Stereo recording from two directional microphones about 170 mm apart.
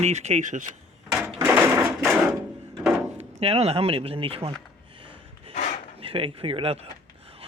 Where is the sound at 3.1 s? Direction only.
40° right (ahead or behind).